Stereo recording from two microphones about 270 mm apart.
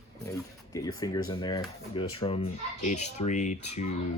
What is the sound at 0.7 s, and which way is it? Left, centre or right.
Speech, centre.